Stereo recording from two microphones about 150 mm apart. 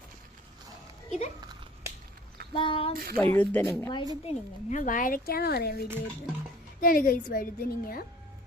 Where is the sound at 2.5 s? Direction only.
35° left (ahead or behind).